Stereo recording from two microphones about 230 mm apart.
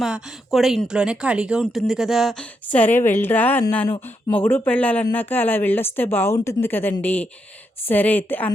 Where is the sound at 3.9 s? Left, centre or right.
Left.